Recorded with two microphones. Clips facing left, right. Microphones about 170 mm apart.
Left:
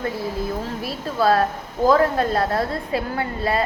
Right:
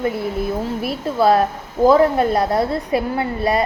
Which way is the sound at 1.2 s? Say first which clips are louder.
Right 3 dB; 15° right (ahead or behind).